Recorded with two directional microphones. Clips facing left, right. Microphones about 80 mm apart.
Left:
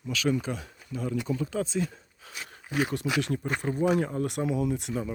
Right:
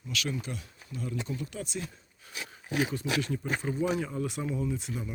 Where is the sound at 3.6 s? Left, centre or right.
Left.